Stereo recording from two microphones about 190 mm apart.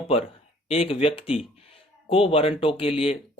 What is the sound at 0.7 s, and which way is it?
Speech, 30° left (ahead or behind).